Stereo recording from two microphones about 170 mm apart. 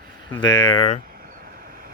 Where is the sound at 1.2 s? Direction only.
60° right (ahead or behind).